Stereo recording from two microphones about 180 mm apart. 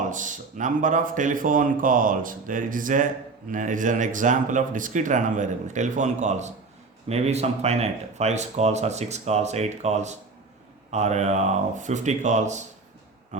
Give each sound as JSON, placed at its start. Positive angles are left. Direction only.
{"t": 0.1, "sound": "speech", "side_deg": -45}